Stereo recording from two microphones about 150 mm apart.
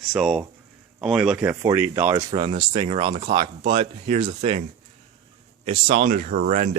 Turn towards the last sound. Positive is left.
turn(degrees=-55)  # may be behind; listen again after turning